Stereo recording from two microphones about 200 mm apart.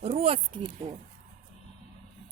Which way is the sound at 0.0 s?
30° right (ahead or behind).